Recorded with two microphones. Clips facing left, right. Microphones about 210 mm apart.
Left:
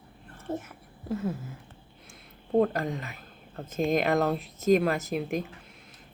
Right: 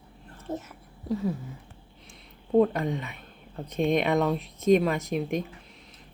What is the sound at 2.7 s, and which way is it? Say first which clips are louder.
Speech: right 2 dB; centre (ahead or behind).